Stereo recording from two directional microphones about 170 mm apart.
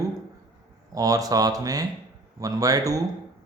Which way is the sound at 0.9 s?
20° right (ahead or behind).